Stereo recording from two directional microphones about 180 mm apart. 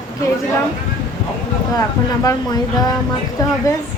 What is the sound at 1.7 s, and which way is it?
A woman's voice, 20° left (ahead or behind).